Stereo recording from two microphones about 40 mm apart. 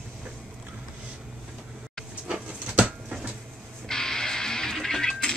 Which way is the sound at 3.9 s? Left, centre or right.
Centre.